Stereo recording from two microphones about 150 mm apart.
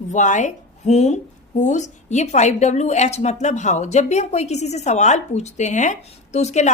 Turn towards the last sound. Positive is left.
turn(degrees=50)  # may be behind; listen again after turning